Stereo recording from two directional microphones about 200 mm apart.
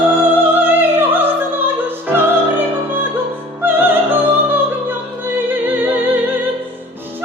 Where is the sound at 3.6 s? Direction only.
10° right (ahead or behind).